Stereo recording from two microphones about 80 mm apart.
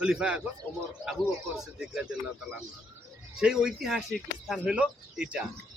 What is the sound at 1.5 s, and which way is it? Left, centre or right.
Speech, centre.